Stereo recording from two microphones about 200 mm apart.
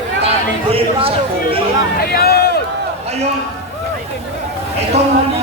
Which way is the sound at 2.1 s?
50° left (ahead or behind).